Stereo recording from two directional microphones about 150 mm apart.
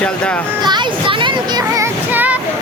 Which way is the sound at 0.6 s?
30° right (ahead or behind).